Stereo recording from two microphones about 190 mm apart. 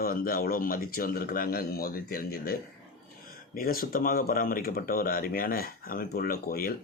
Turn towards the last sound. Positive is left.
turn(degrees=50)  # may be behind; listen again after turning